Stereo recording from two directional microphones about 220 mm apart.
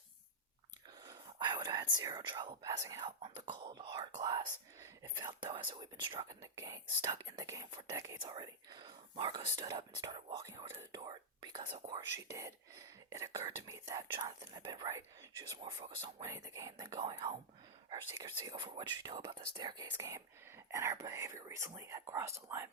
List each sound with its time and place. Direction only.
1.0 s whispering: 20° right (ahead or behind)
3.2 s speech: 20° right (ahead or behind)
16.2 s speech: 15° right (ahead or behind)